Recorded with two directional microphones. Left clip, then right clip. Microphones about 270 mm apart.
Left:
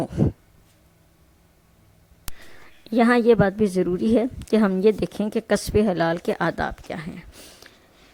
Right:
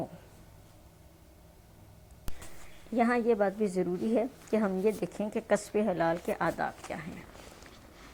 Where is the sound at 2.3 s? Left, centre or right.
Centre.